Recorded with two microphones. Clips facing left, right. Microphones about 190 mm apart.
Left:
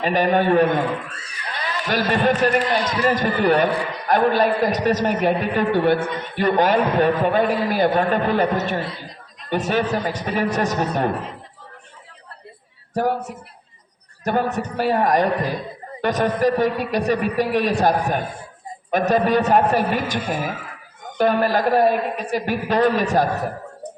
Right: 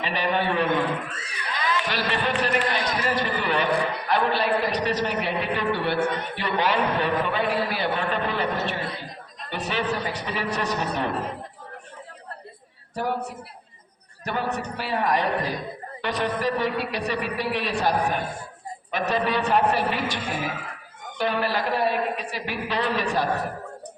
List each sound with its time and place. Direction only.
0.0 s a man's voice: 45° left (ahead or behind)
12.9 s a woman's voice: 45° left (ahead or behind)
14.3 s a man's voice: 45° left (ahead or behind)